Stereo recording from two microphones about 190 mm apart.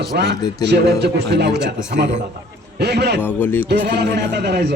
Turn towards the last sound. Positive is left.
turn(degrees=-60)  # may be behind; listen again after turning